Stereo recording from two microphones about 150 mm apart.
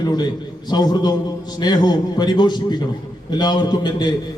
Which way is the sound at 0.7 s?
25° left (ahead or behind).